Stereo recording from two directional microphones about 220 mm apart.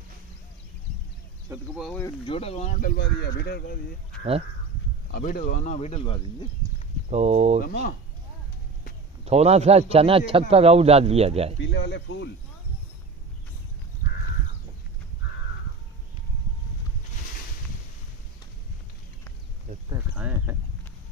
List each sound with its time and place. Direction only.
1.5 s speech: 15° right (ahead or behind)
1.9 s speech: 10° left (ahead or behind)
2.2 s speech: 25° left (ahead or behind); by 3.8 s 45° left (ahead or behind)
5.1 s speech: 40° left (ahead or behind)
7.1 s speech: 30° right (ahead or behind)
7.6 s speech: 40° left (ahead or behind)
9.2 s a man's voice: 30° right (ahead or behind)
11.6 s speech: 50° left (ahead or behind)
19.9 s a sound: 10° right (ahead or behind)